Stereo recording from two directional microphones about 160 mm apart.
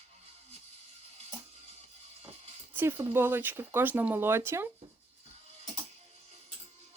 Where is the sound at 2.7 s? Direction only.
15° right (ahead or behind).